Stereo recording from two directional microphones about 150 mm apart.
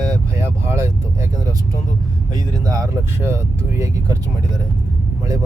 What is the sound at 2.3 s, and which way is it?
Vehicle, 25° right (ahead or behind).